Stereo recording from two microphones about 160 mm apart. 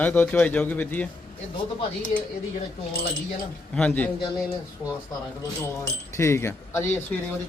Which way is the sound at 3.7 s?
10° left (ahead or behind).